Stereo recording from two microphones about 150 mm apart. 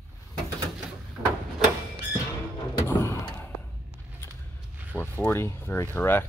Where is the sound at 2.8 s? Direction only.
20° left (ahead or behind).